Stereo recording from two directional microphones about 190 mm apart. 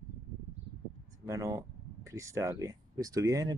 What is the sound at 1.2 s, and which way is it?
Speech, 15° right (ahead or behind).